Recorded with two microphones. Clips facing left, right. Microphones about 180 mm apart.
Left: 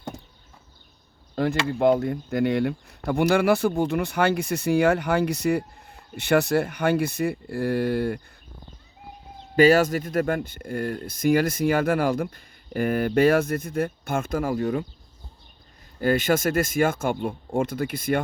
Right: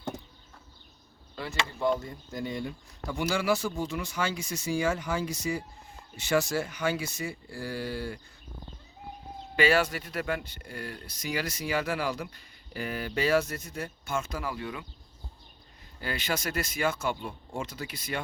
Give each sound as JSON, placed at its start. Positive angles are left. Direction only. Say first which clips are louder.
{"t": 1.4, "sound": "speech", "louder": "left 10 dB", "side_deg": 60}
{"t": 9.6, "sound": "speech", "louder": "left 8 dB", "side_deg": 40}
{"t": 16.0, "sound": "speech", "louder": "left 12 dB", "side_deg": 50}